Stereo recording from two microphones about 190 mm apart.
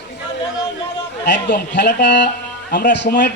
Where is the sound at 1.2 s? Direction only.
65° left (ahead or behind).